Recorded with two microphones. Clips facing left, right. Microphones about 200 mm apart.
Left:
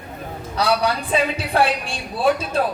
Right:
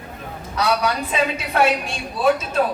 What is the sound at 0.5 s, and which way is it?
A woman's voice, 30° left (ahead or behind).